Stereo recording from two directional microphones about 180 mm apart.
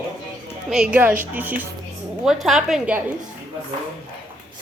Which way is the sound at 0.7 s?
5° right (ahead or behind).